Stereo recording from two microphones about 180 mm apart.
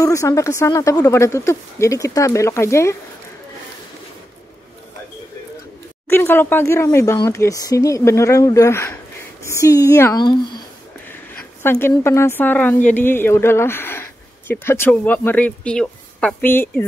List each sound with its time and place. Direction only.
0.0 s speech: 15° left (ahead or behind)
6.0 s speech: 10° left (ahead or behind)
11.6 s speech: 10° left (ahead or behind)